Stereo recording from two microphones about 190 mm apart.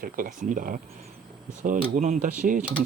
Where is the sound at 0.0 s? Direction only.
45° right (ahead or behind).